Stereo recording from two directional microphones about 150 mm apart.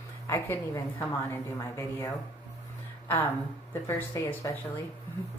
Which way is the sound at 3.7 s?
20° left (ahead or behind).